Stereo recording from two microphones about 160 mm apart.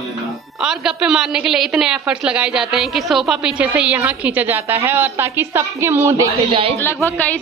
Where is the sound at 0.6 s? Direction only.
5° right (ahead or behind).